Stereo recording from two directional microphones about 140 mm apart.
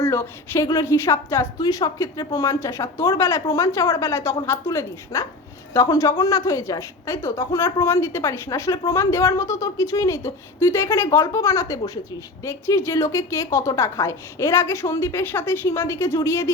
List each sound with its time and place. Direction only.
0.0 s a woman's voice: 20° left (ahead or behind)